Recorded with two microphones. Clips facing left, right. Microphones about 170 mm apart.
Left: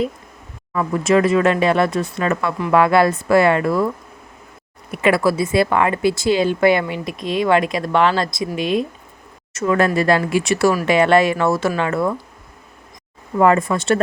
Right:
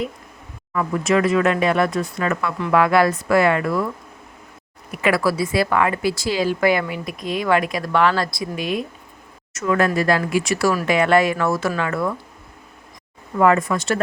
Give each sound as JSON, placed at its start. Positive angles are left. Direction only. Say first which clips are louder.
{"t": 0.7, "sound": "a woman's voice", "louder": "left 3 dB", "side_deg": 30}
{"t": 4.9, "sound": "a woman's voice", "louder": "left 3 dB", "side_deg": 25}
{"t": 13.4, "sound": "a woman's voice", "louder": "left 2 dB", "side_deg": 30}